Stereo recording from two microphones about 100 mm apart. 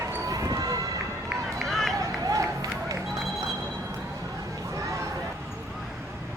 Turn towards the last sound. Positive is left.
turn(degrees=-30)  # may be behind; listen again after turning